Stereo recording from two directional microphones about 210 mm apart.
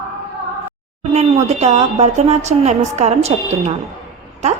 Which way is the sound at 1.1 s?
30° right (ahead or behind).